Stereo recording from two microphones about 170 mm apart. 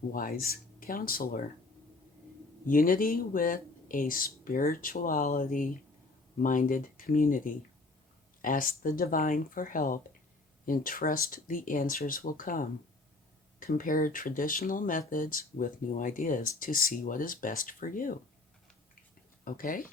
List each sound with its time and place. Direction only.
0.1 s speech: 60° left (ahead or behind)
2.6 s speech: 55° left (ahead or behind)
19.5 s speech: 55° left (ahead or behind)